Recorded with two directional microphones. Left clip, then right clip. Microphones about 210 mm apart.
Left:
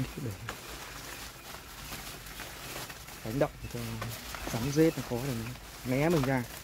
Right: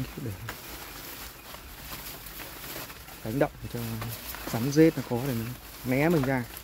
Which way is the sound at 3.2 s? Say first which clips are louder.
Right 3 dB; 20° right (ahead or behind).